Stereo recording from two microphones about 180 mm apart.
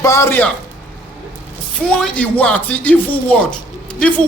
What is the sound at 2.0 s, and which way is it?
Speech, 5° left (ahead or behind).